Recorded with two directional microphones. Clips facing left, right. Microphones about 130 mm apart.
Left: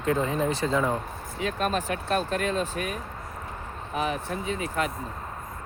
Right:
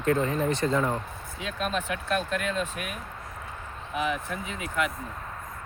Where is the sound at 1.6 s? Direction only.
40° left (ahead or behind).